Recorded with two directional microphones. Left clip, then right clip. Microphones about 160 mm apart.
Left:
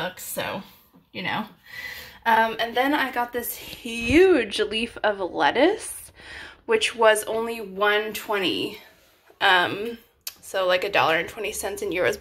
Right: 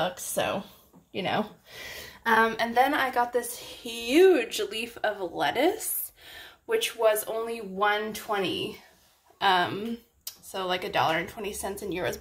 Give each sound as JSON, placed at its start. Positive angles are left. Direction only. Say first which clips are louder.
{"t": 1.3, "sound": "a woman's voice", "louder": "right 1 dB", "side_deg": 20}
{"t": 9.4, "sound": "a woman's voice", "louder": "left 5 dB", "side_deg": 15}